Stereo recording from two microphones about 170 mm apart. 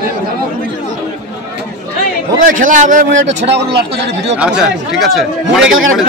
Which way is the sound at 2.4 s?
50° right (ahead or behind).